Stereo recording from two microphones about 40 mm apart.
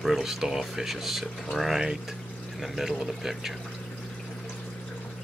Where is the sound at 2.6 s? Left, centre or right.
Centre.